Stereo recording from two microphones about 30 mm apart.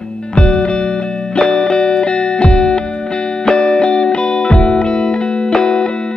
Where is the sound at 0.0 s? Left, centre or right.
Left.